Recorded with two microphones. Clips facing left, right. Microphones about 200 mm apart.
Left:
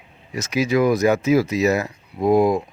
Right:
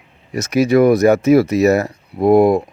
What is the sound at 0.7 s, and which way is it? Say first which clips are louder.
Speech: right 6 dB; 65° right (ahead or behind).